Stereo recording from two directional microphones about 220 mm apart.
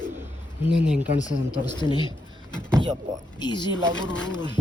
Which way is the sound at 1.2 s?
15° left (ahead or behind).